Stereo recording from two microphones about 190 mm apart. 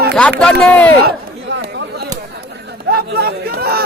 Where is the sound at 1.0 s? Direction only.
60° right (ahead or behind).